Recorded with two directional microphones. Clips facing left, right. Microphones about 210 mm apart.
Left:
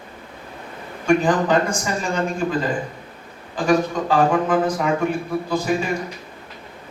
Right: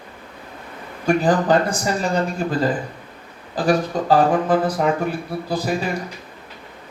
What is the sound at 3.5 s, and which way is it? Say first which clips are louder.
Speech: even; 35° right (ahead or behind).